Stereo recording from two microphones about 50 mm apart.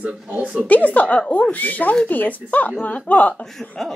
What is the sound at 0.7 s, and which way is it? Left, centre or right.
A woman's voice, left.